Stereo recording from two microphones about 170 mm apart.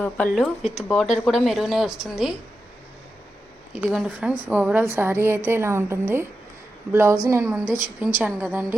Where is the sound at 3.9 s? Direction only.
5° right (ahead or behind).